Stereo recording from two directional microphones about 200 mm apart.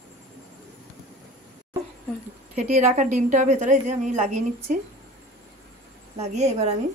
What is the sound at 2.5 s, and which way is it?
A woman's voice, 35° right (ahead or behind).